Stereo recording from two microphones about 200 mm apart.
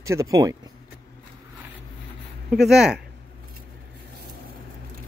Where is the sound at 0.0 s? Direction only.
15° right (ahead or behind).